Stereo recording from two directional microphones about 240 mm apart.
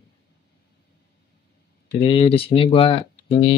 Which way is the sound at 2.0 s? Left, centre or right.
Left.